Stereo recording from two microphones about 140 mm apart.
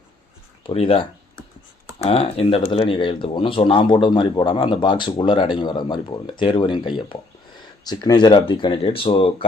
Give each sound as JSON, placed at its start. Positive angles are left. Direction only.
{"t": 0.7, "sound": "speech", "side_deg": 45}
{"t": 2.0, "sound": "speech", "side_deg": 45}